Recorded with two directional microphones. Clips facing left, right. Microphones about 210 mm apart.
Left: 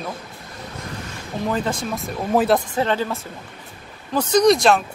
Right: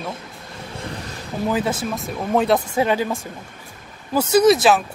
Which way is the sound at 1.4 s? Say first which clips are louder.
Right 2 dB; 5° right (ahead or behind).